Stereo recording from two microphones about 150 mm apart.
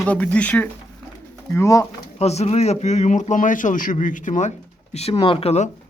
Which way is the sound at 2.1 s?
45° left (ahead or behind).